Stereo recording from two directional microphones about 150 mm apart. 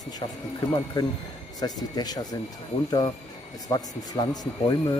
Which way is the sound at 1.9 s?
25° left (ahead or behind).